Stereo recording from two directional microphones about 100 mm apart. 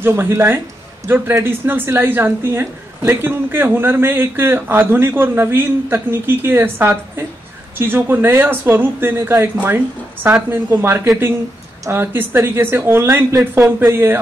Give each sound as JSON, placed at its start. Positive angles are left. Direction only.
{"t": 0.0, "sound": "a woman's voice", "side_deg": -25}